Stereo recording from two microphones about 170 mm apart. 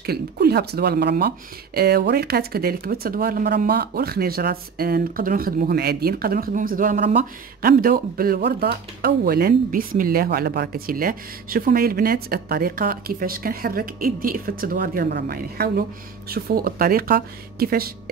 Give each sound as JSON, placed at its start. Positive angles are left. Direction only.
{"t": 0.0, "sound": "speech", "side_deg": -70}